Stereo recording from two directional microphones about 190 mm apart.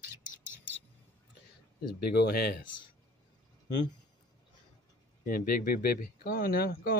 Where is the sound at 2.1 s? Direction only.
55° left (ahead or behind).